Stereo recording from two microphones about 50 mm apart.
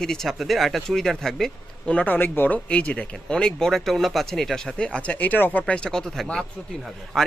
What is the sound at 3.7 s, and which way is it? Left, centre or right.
Speech, centre.